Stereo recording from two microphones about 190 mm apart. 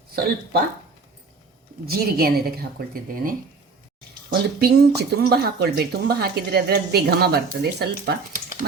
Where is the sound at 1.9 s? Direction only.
55° right (ahead or behind).